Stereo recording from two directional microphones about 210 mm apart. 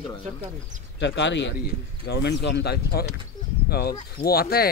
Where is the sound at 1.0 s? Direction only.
60° left (ahead or behind).